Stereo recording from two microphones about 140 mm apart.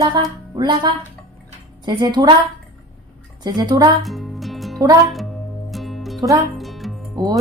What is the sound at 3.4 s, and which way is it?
Speech, 30° right (ahead or behind).